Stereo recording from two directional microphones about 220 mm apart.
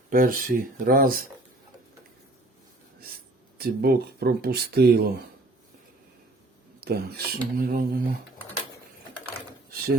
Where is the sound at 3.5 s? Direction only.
45° right (ahead or behind).